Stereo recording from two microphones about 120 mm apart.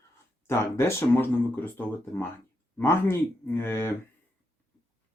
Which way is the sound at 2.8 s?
20° left (ahead or behind).